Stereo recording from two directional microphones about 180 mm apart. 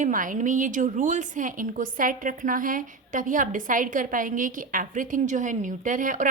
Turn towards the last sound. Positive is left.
turn(degrees=-45)  # may be behind; listen again after turning